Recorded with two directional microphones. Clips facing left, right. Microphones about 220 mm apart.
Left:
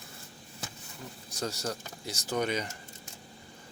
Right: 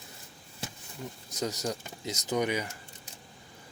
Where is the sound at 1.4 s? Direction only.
20° right (ahead or behind).